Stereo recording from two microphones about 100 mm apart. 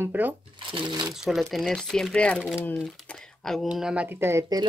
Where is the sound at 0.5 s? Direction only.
55° right (ahead or behind).